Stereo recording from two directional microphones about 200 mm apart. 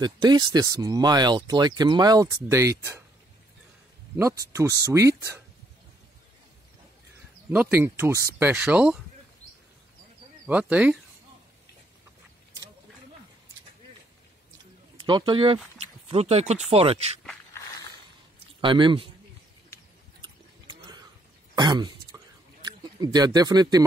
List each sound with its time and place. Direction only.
0.0 s speech: 20° right (ahead or behind)
4.2 s speech: 15° right (ahead or behind)
7.5 s speech: 10° right (ahead or behind)
10.4 s speech: 5° right (ahead or behind)
15.0 s speech: 25° right (ahead or behind)
18.6 s speech: 25° right (ahead or behind)
20.7 s a sound: 20° right (ahead or behind)
21.5 s throat clearing: 20° right (ahead or behind)